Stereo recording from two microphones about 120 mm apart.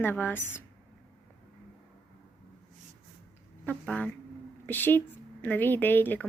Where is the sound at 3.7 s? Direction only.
10° left (ahead or behind).